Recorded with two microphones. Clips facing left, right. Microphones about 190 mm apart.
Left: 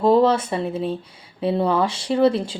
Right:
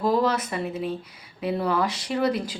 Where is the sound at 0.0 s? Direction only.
30° left (ahead or behind).